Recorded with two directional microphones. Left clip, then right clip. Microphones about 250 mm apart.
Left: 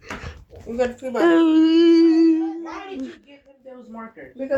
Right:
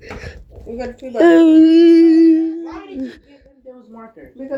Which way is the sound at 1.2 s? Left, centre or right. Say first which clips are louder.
Right 7 dB; centre.